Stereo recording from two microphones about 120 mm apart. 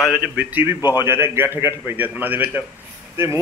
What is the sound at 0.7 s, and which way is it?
Speech, 35° left (ahead or behind).